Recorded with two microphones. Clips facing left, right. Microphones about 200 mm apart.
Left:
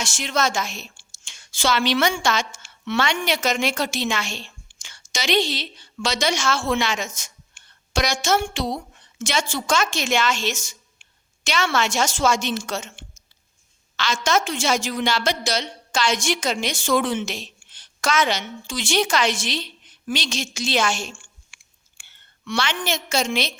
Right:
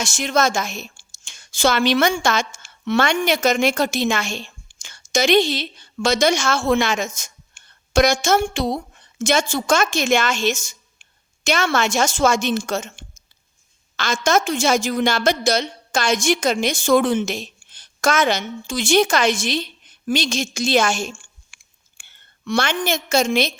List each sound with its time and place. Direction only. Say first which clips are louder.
0.0 s a woman's voice: right 4 dB; 50° right (ahead or behind)
21.5 s clicking: right 1 dB; 50° right (ahead or behind)